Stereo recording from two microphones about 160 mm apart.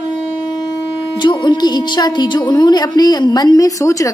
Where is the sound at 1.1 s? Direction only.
30° left (ahead or behind).